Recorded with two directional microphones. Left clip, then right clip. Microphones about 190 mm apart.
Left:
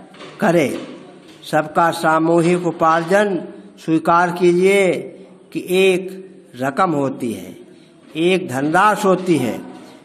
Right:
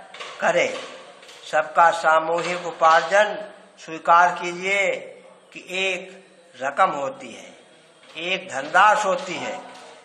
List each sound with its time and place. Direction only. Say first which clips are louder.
0.4 s a man's voice: left 4 dB; 40° left (ahead or behind)